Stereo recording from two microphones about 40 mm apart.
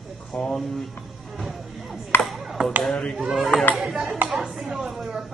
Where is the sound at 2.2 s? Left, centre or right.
Centre.